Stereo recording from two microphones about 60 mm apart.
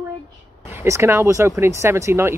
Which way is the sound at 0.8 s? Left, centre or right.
Right.